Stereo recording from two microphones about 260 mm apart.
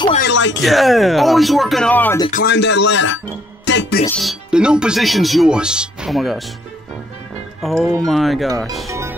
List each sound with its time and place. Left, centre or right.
0.2 s a sound: left
0.6 s speech: centre
2.3 s speech: left
3.6 s music: left
4.2 s speech: centre
7.6 s speech: centre